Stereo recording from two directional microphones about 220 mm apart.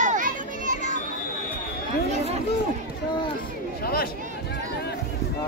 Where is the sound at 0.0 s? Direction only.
35° right (ahead or behind).